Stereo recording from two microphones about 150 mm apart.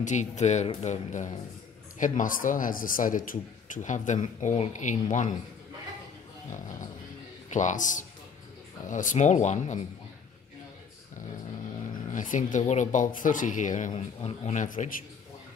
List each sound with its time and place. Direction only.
0.0 s a man's voice: 55° left (ahead or behind)
7.4 s speech: 55° left (ahead or behind)
12.1 s a man's voice: 60° left (ahead or behind)